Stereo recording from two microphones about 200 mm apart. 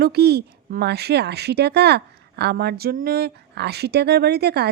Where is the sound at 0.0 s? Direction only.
50° right (ahead or behind).